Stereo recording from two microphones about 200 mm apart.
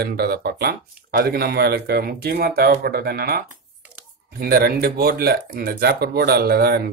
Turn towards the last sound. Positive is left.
turn(degrees=-50)  # may be behind; listen again after turning